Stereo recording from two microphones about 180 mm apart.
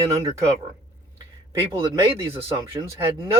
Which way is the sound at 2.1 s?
15° right (ahead or behind).